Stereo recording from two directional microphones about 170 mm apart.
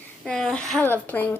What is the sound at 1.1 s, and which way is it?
Speech, 10° left (ahead or behind).